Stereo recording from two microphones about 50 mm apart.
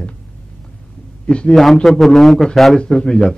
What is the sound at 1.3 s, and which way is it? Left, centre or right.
Speech, centre.